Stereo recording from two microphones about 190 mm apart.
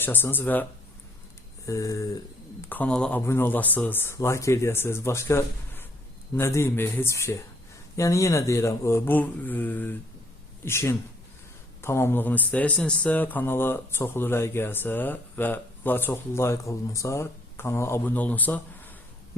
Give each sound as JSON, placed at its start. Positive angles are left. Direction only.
{"t": 0.0, "sound": "speech", "side_deg": 10}